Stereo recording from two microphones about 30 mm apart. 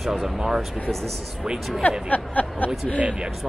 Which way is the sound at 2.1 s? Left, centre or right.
Left.